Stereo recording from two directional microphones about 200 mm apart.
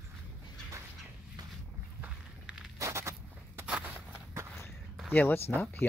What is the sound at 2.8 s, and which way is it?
Zipper, 15° right (ahead or behind).